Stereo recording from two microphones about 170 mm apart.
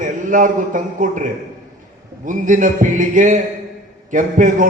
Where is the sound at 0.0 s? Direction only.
50° right (ahead or behind).